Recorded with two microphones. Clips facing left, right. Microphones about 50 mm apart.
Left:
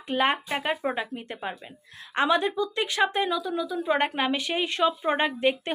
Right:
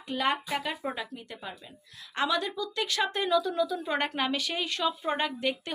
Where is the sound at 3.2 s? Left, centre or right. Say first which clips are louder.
Right 2 dB; centre.